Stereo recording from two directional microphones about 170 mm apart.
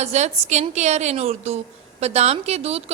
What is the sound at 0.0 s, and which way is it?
A woman's voice, 40° right (ahead or behind).